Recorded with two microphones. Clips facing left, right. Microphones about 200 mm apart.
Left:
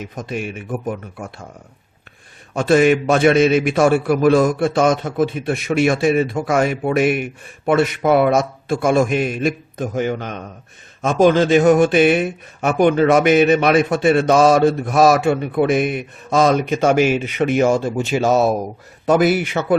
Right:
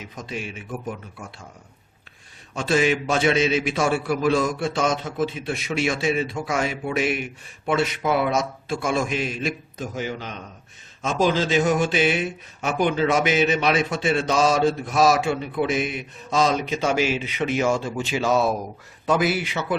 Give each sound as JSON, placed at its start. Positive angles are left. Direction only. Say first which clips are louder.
{"t": 0.0, "sound": "speech", "louder": "left 7 dB", "side_deg": 55}
{"t": 2.5, "sound": "a man's voice", "louder": "left 7 dB", "side_deg": 55}